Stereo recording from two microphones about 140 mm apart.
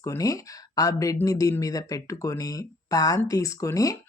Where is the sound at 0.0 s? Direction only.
25° left (ahead or behind).